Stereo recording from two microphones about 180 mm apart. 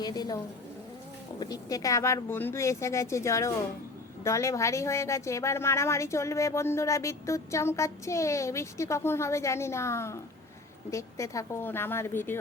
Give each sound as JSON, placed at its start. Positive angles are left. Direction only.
{"t": 0.0, "sound": "a woman's voice", "side_deg": 20}
{"t": 1.4, "sound": "a woman's voice", "side_deg": 20}